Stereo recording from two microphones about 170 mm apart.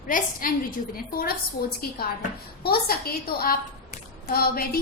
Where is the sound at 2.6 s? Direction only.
65° left (ahead or behind).